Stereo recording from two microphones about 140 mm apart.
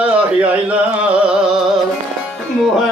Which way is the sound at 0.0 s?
10° right (ahead or behind).